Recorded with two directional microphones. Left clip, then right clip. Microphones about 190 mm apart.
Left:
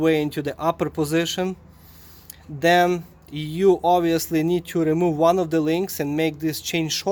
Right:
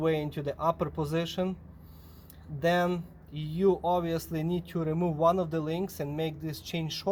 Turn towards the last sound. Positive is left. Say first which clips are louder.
# left 12 dB
turn(degrees=55)  # may be behind; listen again after turning